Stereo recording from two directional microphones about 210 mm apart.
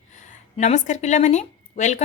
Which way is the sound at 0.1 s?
35° left (ahead or behind).